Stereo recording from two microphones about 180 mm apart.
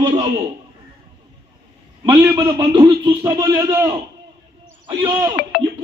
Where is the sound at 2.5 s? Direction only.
25° right (ahead or behind).